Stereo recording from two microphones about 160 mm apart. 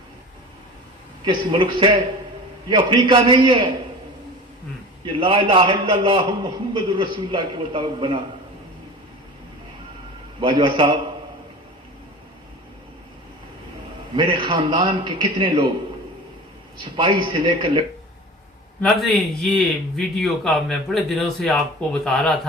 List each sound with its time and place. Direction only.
1.2 s a man's voice: 30° right (ahead or behind)
5.2 s a man's voice: 35° right (ahead or behind)
10.4 s a man's voice: 30° right (ahead or behind)
14.2 s a man's voice: 30° right (ahead or behind)
17.0 s a man's voice: 30° right (ahead or behind)
18.8 s a man's voice: centre (ahead or behind)